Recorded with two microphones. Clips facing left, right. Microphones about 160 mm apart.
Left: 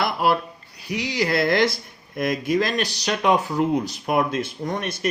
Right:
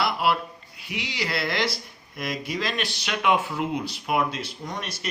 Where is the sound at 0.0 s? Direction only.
45° left (ahead or behind).